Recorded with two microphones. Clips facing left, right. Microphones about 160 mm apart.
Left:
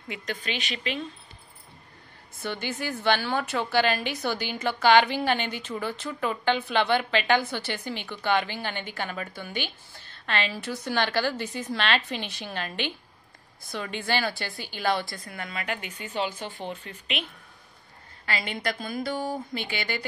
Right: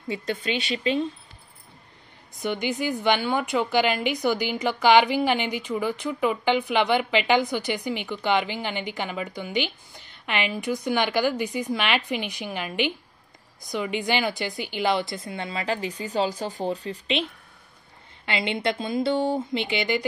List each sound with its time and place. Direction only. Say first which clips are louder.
0.1 s a woman's voice: right 6 dB; 25° right (ahead or behind)
2.3 s a woman's voice: right 5 dB; 15° right (ahead or behind)